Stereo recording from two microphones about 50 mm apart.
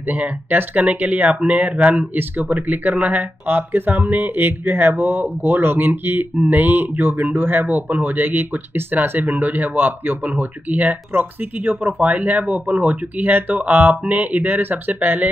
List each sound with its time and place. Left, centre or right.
0.2 s speech: right
9.3 s speech: right